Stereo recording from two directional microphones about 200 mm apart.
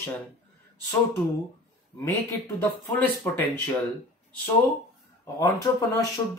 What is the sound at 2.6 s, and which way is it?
Speech, 10° left (ahead or behind).